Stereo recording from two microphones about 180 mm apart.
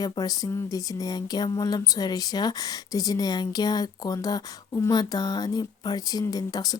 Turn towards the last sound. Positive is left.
turn(degrees=20)  # may be behind; listen again after turning